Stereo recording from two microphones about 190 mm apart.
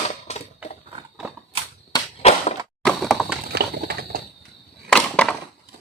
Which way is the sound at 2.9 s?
Centre (ahead or behind).